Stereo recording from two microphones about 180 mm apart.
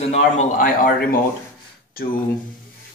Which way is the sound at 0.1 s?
45° left (ahead or behind).